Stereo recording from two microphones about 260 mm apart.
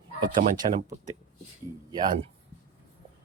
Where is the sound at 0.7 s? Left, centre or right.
Right.